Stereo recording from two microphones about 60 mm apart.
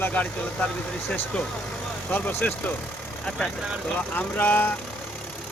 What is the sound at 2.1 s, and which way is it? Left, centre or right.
Speech, left.